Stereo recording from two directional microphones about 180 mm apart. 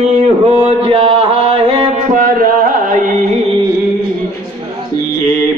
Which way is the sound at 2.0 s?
50° right (ahead or behind).